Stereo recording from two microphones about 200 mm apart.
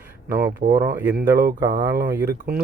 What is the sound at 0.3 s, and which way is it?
Speech, 45° right (ahead or behind).